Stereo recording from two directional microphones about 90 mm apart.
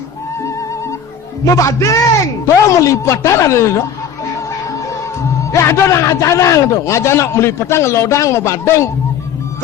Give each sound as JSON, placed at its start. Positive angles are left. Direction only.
{"t": 0.4, "sound": "music", "side_deg": 35}
{"t": 1.5, "sound": "a man's voice", "side_deg": 35}
{"t": 5.4, "sound": "a man's voice", "side_deg": 35}